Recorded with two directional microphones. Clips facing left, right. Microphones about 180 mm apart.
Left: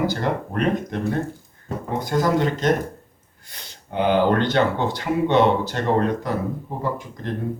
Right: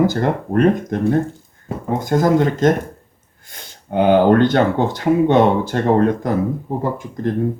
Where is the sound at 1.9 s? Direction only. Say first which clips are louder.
Right 5 dB; 45° right (ahead or behind).